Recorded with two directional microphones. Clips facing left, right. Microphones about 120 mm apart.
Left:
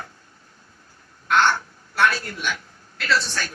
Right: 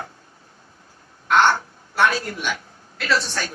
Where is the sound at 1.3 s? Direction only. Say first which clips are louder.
Right 2 dB; 15° right (ahead or behind).